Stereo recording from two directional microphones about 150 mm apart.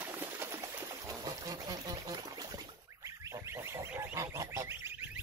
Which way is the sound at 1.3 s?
25° right (ahead or behind).